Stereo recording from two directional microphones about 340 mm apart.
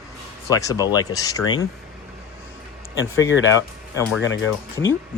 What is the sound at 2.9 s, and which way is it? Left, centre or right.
Speech, left.